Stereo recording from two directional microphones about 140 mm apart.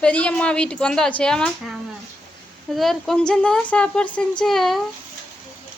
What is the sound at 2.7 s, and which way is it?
A woman's voice, centre (ahead or behind).